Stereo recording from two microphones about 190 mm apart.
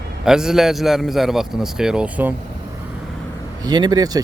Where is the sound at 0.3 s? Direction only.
5° right (ahead or behind).